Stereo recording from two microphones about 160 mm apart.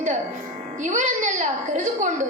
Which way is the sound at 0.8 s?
50° right (ahead or behind).